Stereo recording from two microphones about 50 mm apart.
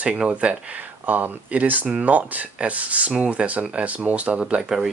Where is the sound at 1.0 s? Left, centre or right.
Right.